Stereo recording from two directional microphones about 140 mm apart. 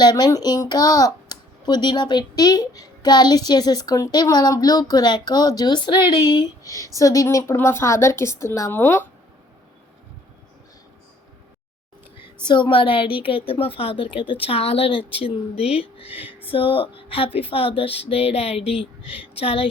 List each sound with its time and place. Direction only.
0.0 s a child's voice: 30° left (ahead or behind)
12.5 s speech: 35° left (ahead or behind)
16.1 s a sound: 10° right (ahead or behind)
16.5 s speech: 40° left (ahead or behind)